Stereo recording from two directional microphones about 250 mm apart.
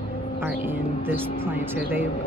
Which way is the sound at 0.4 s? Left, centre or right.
Centre.